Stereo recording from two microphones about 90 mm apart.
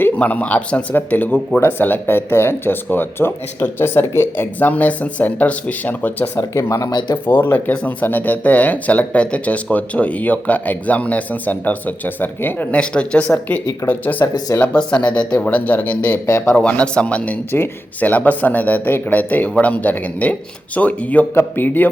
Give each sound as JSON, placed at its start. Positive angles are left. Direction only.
{"t": 0.0, "sound": "speech", "side_deg": 15}
{"t": 6.6, "sound": "speech", "side_deg": 35}
{"t": 7.3, "sound": "speech", "side_deg": 20}
{"t": 14.3, "sound": "speech", "side_deg": 45}
{"t": 14.6, "sound": "speech", "side_deg": 10}
{"t": 16.2, "sound": "speech", "side_deg": 35}
{"t": 16.6, "sound": "speech", "side_deg": 15}